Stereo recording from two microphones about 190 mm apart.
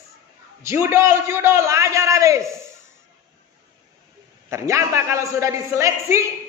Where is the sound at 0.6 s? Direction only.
15° right (ahead or behind).